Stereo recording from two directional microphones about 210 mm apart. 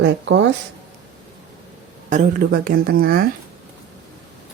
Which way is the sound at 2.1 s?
40° right (ahead or behind).